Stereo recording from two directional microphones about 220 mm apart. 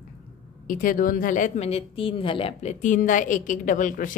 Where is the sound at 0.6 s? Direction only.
40° left (ahead or behind).